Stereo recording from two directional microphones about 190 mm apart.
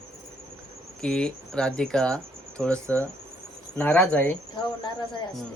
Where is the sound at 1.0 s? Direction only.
5° left (ahead or behind).